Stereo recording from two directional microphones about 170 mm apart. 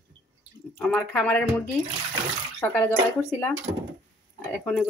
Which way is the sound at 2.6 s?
10° left (ahead or behind).